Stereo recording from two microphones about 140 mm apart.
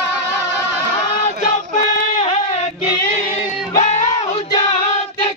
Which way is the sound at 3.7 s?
55° left (ahead or behind).